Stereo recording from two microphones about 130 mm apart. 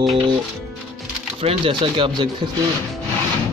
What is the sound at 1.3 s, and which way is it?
Speech, 45° right (ahead or behind).